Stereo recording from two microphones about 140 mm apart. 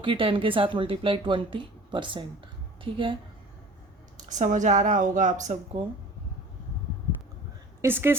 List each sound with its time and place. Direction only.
0.0 s a woman's voice: 40° right (ahead or behind)
4.3 s a woman's voice: 60° right (ahead or behind)
7.8 s a woman's voice: 15° right (ahead or behind)